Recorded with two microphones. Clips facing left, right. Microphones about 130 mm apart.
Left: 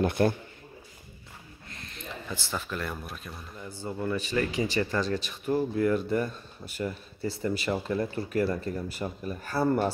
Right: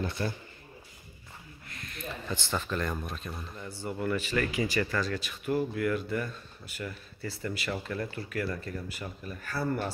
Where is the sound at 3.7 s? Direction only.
20° left (ahead or behind).